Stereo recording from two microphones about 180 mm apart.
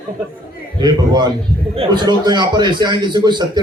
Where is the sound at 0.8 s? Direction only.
25° right (ahead or behind).